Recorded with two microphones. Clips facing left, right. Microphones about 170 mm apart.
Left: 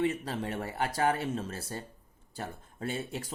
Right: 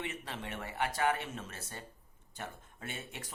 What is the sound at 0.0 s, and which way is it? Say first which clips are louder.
Speech: left 10 dB; 35° left (ahead or behind).